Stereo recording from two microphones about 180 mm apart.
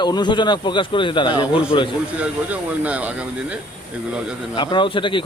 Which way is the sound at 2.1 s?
5° right (ahead or behind).